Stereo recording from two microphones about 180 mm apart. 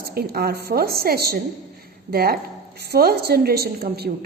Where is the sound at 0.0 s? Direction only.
60° right (ahead or behind).